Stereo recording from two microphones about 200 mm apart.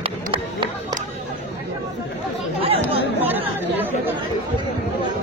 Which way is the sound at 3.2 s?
10° right (ahead or behind).